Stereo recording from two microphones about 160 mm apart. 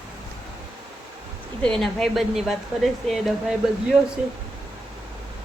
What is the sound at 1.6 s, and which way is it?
Speech, centre (ahead or behind).